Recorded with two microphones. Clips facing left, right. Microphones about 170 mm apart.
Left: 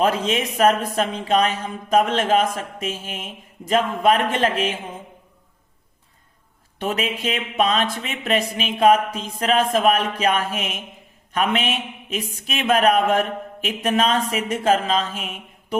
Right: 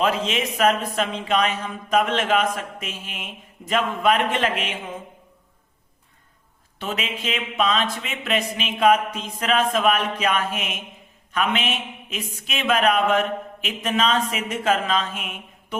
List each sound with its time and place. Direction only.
0.0 s speech: 40° left (ahead or behind)
6.7 s speech: 40° left (ahead or behind)